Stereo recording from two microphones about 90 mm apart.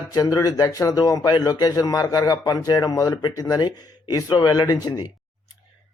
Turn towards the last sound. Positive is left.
turn(degrees=50)  # may be behind; listen again after turning